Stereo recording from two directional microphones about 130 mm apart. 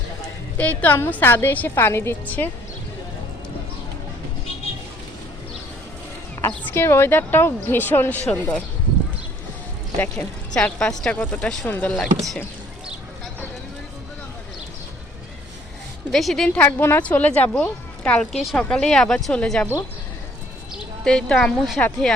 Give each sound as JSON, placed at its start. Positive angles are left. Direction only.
{"t": 0.5, "sound": "speech", "side_deg": 15}
{"t": 6.4, "sound": "speech", "side_deg": 15}
{"t": 10.0, "sound": "speech", "side_deg": 10}
{"t": 16.1, "sound": "speech", "side_deg": 0}
{"t": 21.0, "sound": "speech", "side_deg": 5}